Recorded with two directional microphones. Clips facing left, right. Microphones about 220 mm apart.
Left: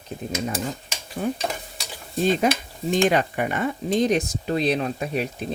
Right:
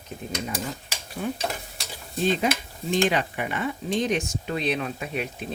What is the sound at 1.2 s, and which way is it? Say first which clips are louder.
Speech: left 4 dB; 35° left (ahead or behind).